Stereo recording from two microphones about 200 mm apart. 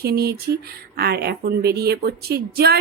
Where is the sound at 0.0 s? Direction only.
50° right (ahead or behind).